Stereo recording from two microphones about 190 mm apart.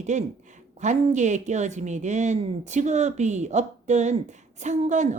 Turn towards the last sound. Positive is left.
turn(degrees=-40)  # may be behind; listen again after turning